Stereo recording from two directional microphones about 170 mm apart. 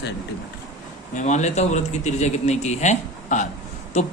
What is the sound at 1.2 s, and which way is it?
A man's voice, 45° left (ahead or behind).